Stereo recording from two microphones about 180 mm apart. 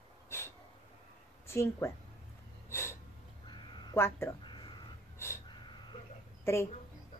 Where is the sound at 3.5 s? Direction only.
25° left (ahead or behind).